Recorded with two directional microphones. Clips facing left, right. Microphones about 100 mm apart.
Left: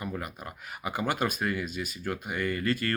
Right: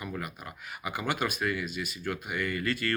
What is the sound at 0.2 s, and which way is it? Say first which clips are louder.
Speech: left 1 dB; 35° left (ahead or behind).